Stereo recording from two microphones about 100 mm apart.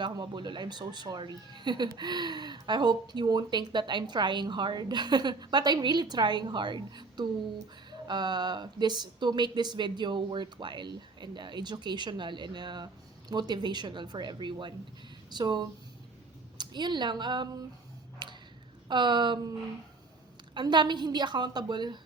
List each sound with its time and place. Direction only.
0.0 s speech: 50° right (ahead or behind)
18.2 s a sound: 45° right (ahead or behind)
18.9 s speech: 50° right (ahead or behind)
20.5 s speech: 50° right (ahead or behind)